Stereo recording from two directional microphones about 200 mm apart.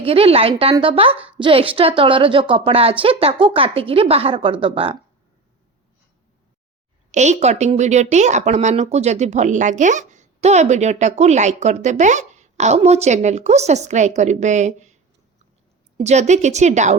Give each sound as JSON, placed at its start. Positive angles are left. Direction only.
{"t": 0.0, "sound": "a woman's voice", "side_deg": -30}
{"t": 7.1, "sound": "a woman's voice", "side_deg": -35}
{"t": 16.0, "sound": "a woman's voice", "side_deg": -35}